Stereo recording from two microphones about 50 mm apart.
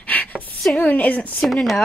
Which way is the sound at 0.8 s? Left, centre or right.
Left.